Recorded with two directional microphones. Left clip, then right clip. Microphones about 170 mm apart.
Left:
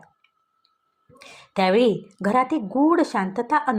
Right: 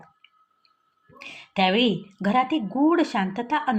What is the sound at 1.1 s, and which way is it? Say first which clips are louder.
A woman's voice: left 1 dB; 30° left (ahead or behind).